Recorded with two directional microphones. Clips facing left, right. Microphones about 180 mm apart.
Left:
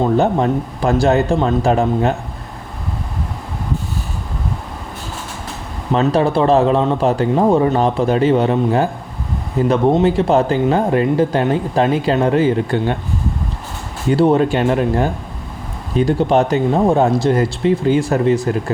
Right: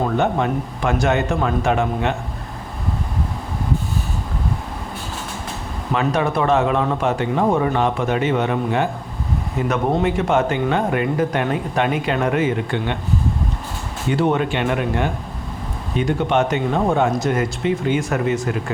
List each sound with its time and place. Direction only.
0.2 s speech: 35° left (ahead or behind)
5.9 s speech: 30° left (ahead or behind)
14.1 s speech: 35° left (ahead or behind)